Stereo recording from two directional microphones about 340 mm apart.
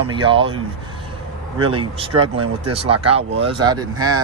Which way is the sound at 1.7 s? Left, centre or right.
Centre.